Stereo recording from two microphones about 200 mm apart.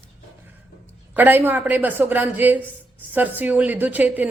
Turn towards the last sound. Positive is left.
turn(degrees=-10)  # may be behind; listen again after turning